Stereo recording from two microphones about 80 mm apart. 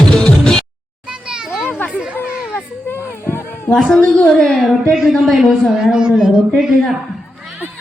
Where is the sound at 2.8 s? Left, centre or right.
Left.